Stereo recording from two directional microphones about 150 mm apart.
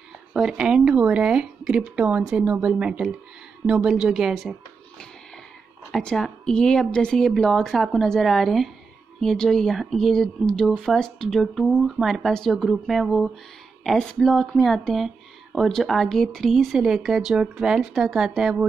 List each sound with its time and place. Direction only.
0.3 s speech: 5° right (ahead or behind)
5.9 s speech: centre (ahead or behind)